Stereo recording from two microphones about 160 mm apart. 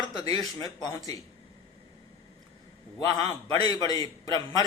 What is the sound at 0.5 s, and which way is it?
Speech, 20° left (ahead or behind).